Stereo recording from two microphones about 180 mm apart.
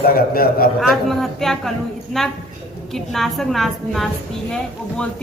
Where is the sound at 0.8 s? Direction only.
Centre (ahead or behind).